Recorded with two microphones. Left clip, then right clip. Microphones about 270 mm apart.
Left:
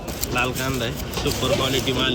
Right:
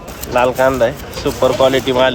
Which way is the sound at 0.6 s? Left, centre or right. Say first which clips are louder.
Right 13 dB; right.